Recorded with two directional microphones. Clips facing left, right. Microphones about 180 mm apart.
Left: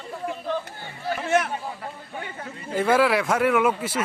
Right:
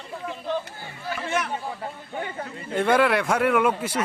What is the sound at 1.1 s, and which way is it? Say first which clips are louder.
Chatter: left 5 dB; 50° left (ahead or behind).